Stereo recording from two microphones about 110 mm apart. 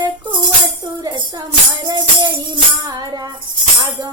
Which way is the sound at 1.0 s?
40° right (ahead or behind).